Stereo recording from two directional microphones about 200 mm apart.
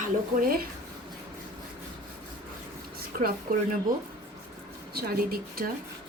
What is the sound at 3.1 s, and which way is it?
Speech, 45° right (ahead or behind).